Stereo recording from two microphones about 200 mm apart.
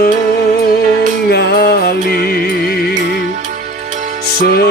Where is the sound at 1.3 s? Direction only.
55° left (ahead or behind).